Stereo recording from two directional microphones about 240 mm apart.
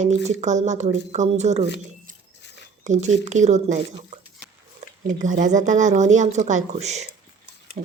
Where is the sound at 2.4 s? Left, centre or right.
Left.